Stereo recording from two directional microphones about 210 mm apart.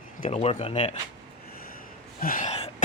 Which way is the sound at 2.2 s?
40° left (ahead or behind).